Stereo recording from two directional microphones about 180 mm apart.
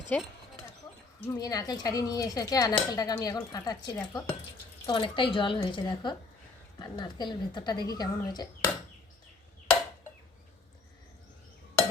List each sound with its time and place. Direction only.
0.1 s speech: 5° left (ahead or behind)
1.3 s speech: 20° left (ahead or behind)
4.9 s speech: 25° left (ahead or behind)